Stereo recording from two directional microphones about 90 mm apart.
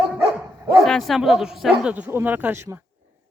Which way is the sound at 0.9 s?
Centre (ahead or behind).